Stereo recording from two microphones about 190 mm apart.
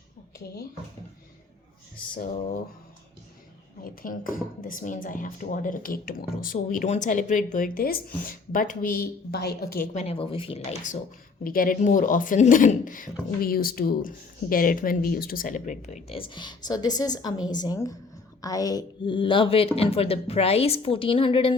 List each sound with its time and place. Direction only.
4.0 s speech: 45° left (ahead or behind)
11.4 s a woman's voice: 50° left (ahead or behind); by 21.5 s 30° left (ahead or behind)